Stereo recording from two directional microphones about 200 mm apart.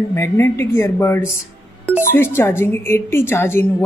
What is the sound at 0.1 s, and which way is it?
A woman's voice, 10° left (ahead or behind).